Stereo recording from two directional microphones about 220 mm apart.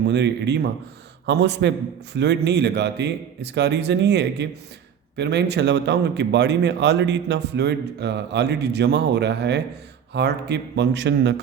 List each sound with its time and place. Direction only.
0.1 s speech: 50° right (ahead or behind)